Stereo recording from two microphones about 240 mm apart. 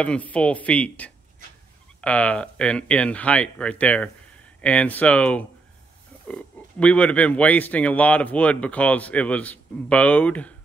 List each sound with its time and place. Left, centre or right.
0.0 s speech: centre